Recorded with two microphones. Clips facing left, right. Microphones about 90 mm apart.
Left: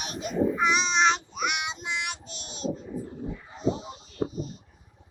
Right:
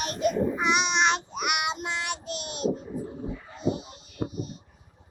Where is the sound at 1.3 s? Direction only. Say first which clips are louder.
Right 2 dB; 60° right (ahead or behind).